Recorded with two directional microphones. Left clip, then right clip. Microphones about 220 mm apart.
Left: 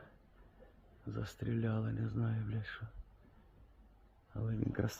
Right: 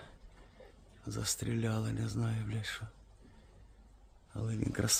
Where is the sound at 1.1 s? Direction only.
5° right (ahead or behind).